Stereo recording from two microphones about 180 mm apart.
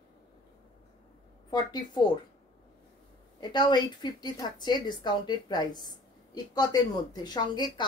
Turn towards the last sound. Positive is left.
turn(degrees=25)  # may be behind; listen again after turning